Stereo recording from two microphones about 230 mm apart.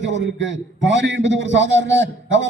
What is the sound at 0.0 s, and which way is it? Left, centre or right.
A man's voice, right.